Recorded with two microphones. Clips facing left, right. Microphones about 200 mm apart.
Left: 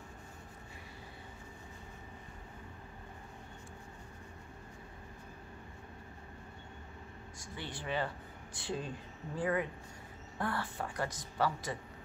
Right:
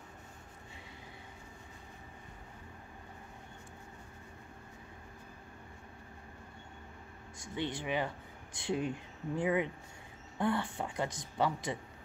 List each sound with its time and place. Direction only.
7.5 s a woman's voice: 20° right (ahead or behind)